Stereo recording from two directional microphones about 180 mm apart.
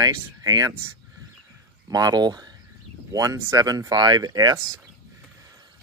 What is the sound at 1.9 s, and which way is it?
Speech, 20° right (ahead or behind).